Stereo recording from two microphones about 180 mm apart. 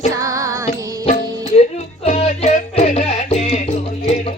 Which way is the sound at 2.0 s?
35° left (ahead or behind).